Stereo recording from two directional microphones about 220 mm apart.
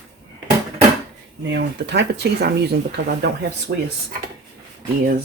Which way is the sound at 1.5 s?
50° right (ahead or behind).